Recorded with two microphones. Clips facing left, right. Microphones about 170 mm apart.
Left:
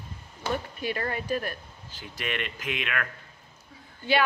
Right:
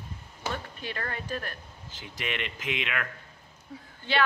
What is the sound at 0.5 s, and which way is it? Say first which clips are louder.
Speech: left 6 dB; 10° left (ahead or behind).